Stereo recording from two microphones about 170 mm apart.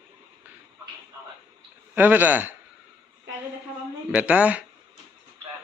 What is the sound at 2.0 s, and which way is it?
Speech, 10° right (ahead or behind).